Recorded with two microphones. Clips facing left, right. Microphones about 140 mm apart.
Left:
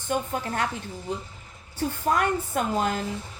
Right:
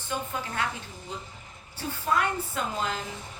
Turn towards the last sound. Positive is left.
turn(degrees=50)  # may be behind; listen again after turning